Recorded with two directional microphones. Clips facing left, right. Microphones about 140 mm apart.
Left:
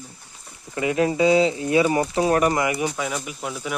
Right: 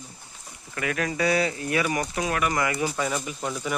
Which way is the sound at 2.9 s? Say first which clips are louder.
Even; centre (ahead or behind).